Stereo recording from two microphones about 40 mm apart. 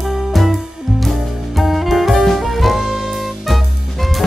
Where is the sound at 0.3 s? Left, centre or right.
Centre.